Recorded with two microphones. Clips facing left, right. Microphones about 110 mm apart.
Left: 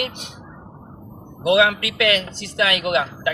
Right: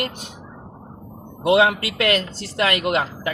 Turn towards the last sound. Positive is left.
turn(degrees=-40)  # may be behind; listen again after turning